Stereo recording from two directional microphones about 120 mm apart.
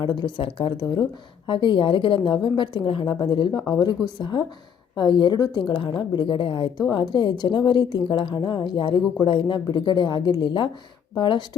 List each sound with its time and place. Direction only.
0.0 s a woman's voice: 40° left (ahead or behind)
3.5 s a woman's voice: 30° left (ahead or behind)